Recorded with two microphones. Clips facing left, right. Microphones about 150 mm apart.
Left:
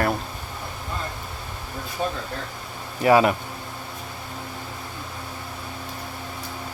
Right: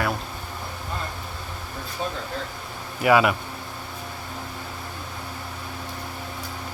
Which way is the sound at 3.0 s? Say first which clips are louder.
Left 2 dB; 35° left (ahead or behind).